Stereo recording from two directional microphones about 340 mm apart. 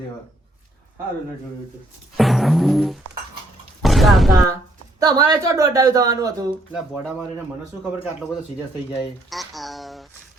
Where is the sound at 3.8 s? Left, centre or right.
Centre.